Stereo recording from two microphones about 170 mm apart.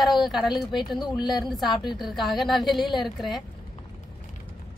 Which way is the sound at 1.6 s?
25° left (ahead or behind).